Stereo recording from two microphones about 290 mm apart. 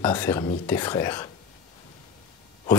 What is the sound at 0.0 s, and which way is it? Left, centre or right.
Speech, centre.